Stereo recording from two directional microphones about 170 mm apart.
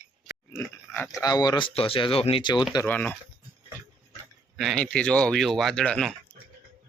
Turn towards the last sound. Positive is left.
turn(degrees=5)  # may be behind; listen again after turning